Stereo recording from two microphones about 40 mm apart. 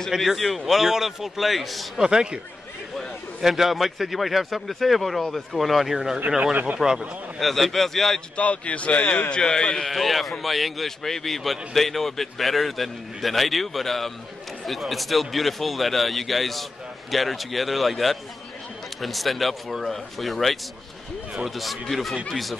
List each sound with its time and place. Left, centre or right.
0.4 s a man's voice: centre
2.0 s speech: centre
3.3 s a man's voice: centre
8.4 s a man's voice: left
9.3 s a man's voice: centre
9.8 s a man's voice: centre